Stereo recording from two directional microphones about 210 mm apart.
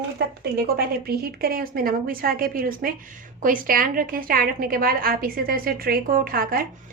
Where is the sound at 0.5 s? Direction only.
45° right (ahead or behind).